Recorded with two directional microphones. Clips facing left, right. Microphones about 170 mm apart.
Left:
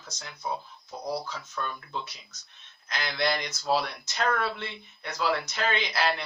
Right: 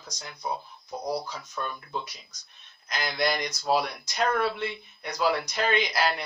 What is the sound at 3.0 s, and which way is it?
Speech, 15° right (ahead or behind).